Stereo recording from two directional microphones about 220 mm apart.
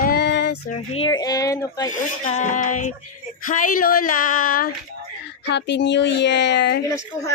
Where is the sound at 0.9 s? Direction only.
20° left (ahead or behind).